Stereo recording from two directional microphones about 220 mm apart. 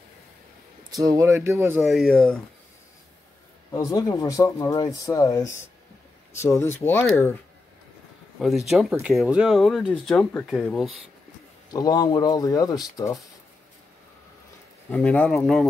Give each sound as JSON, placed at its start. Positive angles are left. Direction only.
{"t": 1.0, "sound": "speech", "side_deg": -15}
{"t": 1.9, "sound": "speech", "side_deg": 0}
{"t": 3.7, "sound": "speech", "side_deg": 15}
{"t": 8.4, "sound": "speech", "side_deg": 0}
{"t": 11.7, "sound": "speech", "side_deg": 15}
{"t": 14.9, "sound": "speech", "side_deg": 5}